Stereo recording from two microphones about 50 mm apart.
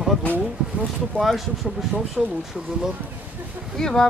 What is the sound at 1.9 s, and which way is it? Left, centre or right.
Speech, right.